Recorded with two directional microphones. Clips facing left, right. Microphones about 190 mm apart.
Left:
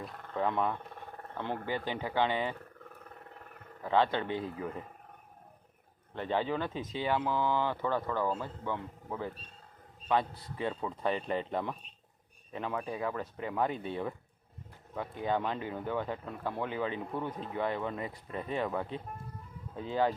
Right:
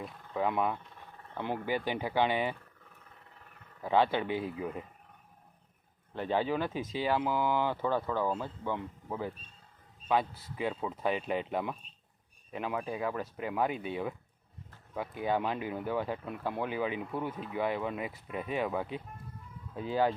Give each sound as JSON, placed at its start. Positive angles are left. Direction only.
{"t": 0.3, "sound": "speech", "side_deg": -10}
{"t": 0.8, "sound": "a sound", "side_deg": 55}
{"t": 1.4, "sound": "speech", "side_deg": -15}
{"t": 3.8, "sound": "speech", "side_deg": -10}
{"t": 6.1, "sound": "speech", "side_deg": -10}
{"t": 17.3, "sound": "speech", "side_deg": 35}
{"t": 17.6, "sound": "speech", "side_deg": -10}